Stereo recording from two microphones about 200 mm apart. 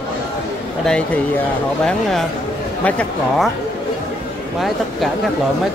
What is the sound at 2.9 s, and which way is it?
Speech, 5° left (ahead or behind).